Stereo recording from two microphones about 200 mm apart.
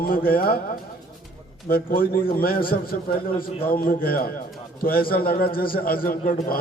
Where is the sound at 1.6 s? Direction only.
45° left (ahead or behind).